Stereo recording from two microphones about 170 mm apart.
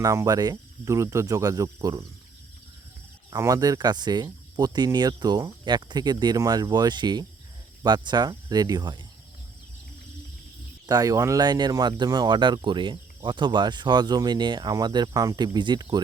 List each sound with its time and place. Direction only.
0.0 s speech: 20° right (ahead or behind)
3.2 s speech: 20° right (ahead or behind)
10.8 s speech: 20° right (ahead or behind)